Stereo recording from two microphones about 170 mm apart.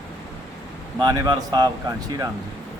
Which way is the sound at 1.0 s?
20° right (ahead or behind).